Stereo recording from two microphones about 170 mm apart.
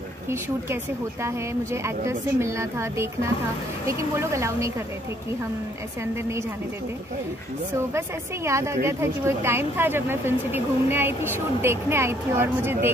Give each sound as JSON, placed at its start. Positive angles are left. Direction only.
{"t": 1.2, "sound": "speech", "side_deg": -15}
{"t": 8.5, "sound": "speech", "side_deg": -15}